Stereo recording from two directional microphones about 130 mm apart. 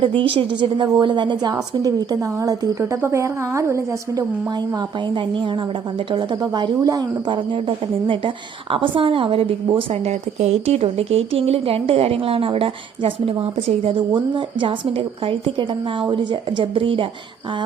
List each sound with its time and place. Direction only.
0.2 s a woman's voice: 40° right (ahead or behind)
9.9 s speech: 60° right (ahead or behind); by 17.1 s 40° right (ahead or behind)